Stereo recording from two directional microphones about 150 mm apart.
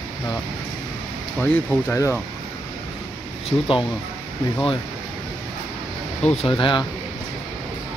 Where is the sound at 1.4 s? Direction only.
10° left (ahead or behind).